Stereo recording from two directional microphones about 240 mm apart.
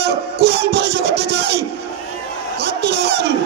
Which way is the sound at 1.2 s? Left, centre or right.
Right.